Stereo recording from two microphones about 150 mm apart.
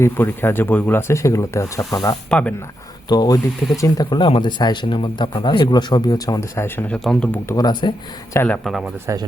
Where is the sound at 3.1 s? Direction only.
25° left (ahead or behind).